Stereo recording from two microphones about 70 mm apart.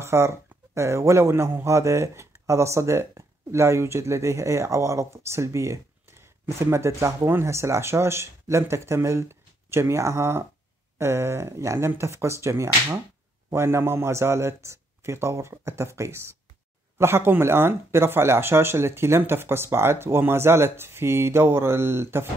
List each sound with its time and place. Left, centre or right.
0.0 s speech: right